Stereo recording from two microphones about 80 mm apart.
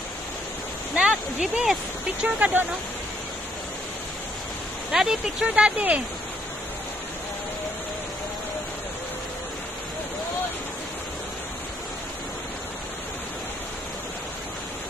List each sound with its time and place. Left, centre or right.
0.9 s a sound: centre
2.2 s speech: centre
4.9 s speech: centre